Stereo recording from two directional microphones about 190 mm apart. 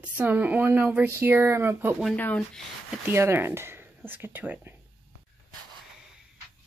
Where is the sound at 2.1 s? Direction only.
10° left (ahead or behind).